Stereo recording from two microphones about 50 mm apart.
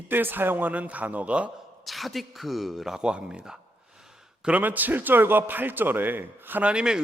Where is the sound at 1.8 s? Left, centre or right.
Centre.